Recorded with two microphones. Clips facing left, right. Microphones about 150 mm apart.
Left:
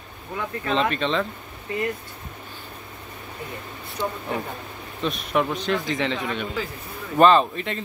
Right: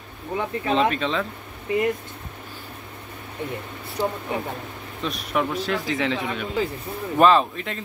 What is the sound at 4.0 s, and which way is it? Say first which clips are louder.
Speech: right 3 dB; 35° right (ahead or behind).